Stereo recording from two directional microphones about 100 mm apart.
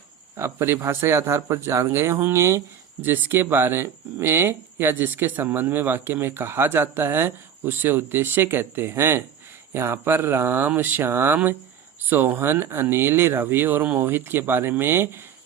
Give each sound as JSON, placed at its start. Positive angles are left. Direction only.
{"t": 0.3, "sound": "speech", "side_deg": -25}